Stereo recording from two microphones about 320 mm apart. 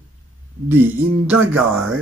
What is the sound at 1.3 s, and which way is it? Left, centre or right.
Speech, centre.